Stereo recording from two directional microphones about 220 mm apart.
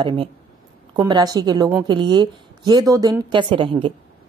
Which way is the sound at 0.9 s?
20° right (ahead or behind).